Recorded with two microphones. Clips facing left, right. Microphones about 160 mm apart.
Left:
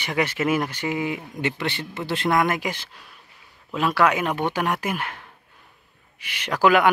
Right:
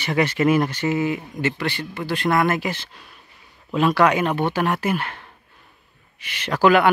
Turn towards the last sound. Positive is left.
turn(degrees=10)  # may be behind; listen again after turning